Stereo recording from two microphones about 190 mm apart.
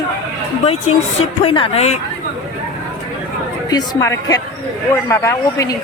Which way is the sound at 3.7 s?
20° left (ahead or behind).